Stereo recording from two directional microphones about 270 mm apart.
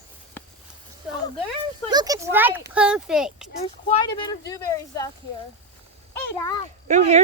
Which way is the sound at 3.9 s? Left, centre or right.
Centre.